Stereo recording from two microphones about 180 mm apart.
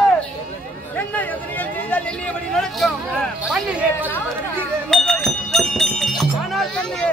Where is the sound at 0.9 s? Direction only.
10° left (ahead or behind); by 4.1 s 5° right (ahead or behind).